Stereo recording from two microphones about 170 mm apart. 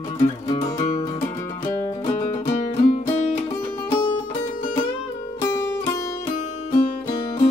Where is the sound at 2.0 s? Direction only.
40° left (ahead or behind).